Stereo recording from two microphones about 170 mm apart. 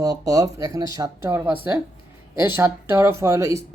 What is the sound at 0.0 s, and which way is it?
Speech, 20° right (ahead or behind).